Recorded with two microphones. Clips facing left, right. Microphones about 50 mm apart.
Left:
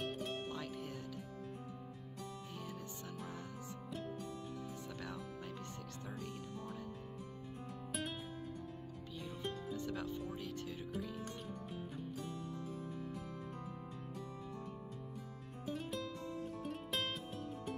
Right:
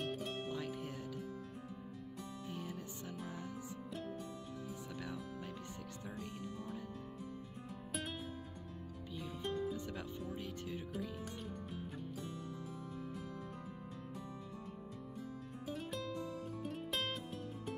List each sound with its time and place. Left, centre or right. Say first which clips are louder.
0.0 s music: even; centre
0.5 s music: right 2 dB; centre
2.5 s music: right 2 dB; right
9.2 s music: right 4 dB; centre
9.8 s music: left 3 dB; right
10.9 s music: even; centre
15.6 s music: left 1 dB; centre